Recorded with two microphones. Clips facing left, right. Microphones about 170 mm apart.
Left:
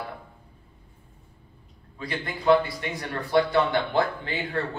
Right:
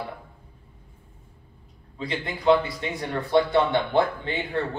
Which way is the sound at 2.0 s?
20° right (ahead or behind).